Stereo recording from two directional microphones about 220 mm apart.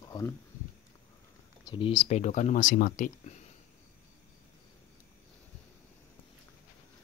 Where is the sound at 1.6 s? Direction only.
20° left (ahead or behind); by 3.3 s 35° left (ahead or behind).